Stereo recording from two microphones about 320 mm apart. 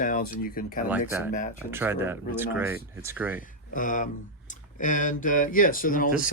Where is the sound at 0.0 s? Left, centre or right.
Left.